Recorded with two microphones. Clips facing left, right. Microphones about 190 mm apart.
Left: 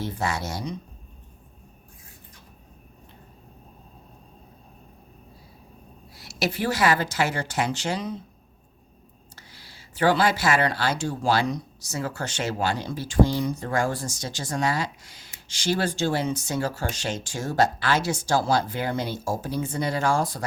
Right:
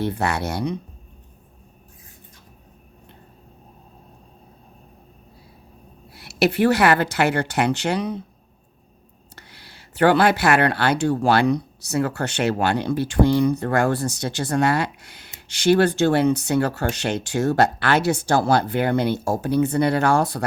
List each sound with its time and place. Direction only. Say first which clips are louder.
0.0 s speech: right 5 dB; 65° right (ahead or behind)
6.1 s speech: right 8 dB; 60° right (ahead or behind)
9.3 s speech: right 4 dB; 65° right (ahead or behind)